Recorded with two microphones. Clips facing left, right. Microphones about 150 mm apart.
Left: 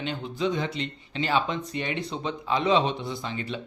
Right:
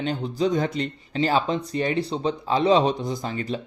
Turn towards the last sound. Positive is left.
turn(degrees=-40)  # may be behind; listen again after turning